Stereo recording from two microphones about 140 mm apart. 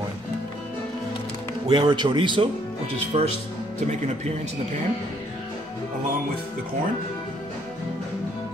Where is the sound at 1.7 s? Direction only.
30° right (ahead or behind).